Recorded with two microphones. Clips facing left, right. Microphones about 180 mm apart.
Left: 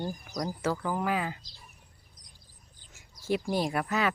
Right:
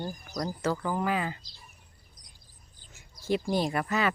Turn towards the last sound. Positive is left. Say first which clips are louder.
# right 1 dB
turn(degrees=0)  # may be behind; listen again after turning